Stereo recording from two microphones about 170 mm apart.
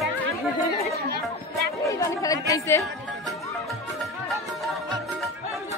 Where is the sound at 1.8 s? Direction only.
20° left (ahead or behind).